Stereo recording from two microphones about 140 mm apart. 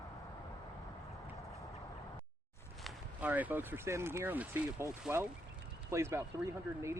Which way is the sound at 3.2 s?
10° right (ahead or behind).